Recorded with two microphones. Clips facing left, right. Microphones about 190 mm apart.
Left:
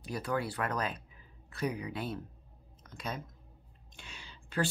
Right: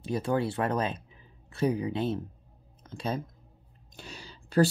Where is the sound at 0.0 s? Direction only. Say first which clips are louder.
Right 6 dB; 25° right (ahead or behind).